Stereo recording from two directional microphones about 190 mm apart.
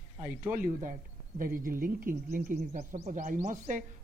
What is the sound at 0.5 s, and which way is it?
Speech, 45° right (ahead or behind).